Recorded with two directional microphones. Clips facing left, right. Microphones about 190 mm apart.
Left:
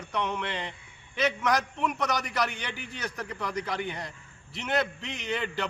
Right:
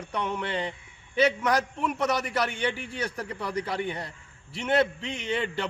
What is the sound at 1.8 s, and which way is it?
Speech, 5° right (ahead or behind).